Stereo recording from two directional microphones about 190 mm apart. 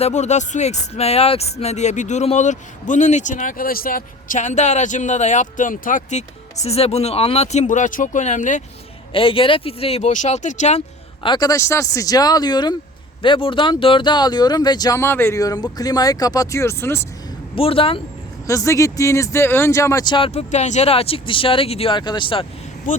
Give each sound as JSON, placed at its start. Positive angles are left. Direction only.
{"t": 0.0, "sound": "speech", "side_deg": 35}
{"t": 9.1, "sound": "speech", "side_deg": 30}
{"t": 17.5, "sound": "speech", "side_deg": 30}
{"t": 18.4, "sound": "speech", "side_deg": 15}